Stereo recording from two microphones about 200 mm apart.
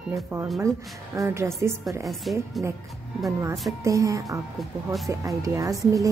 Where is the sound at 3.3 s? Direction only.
15° right (ahead or behind).